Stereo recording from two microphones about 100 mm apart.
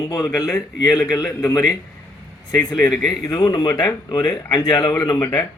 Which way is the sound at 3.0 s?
40° left (ahead or behind).